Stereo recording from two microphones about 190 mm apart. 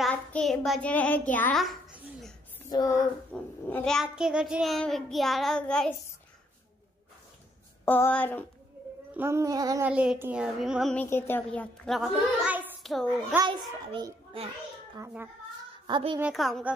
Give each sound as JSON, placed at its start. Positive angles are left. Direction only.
{"t": 0.0, "sound": "child singing", "side_deg": 5}
{"t": 1.3, "sound": "a woman's voice", "side_deg": 5}
{"t": 2.6, "sound": "speech", "side_deg": 15}
{"t": 3.3, "sound": "a woman's voice", "side_deg": 5}
{"t": 7.8, "sound": "speech", "side_deg": 10}
{"t": 9.1, "sound": "a child's voice", "side_deg": -15}
{"t": 9.8, "sound": "a woman's voice", "side_deg": -5}
{"t": 13.5, "sound": "a child's voice", "side_deg": -20}
{"t": 15.9, "sound": "a child's voice", "side_deg": -25}
{"t": 16.2, "sound": "a woman's voice", "side_deg": 0}